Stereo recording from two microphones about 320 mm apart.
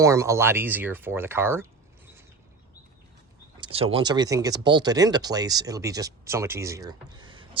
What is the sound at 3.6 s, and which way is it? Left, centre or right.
Speech, centre.